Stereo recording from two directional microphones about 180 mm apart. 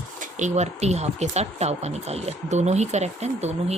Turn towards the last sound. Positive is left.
turn(degrees=-35)  # may be behind; listen again after turning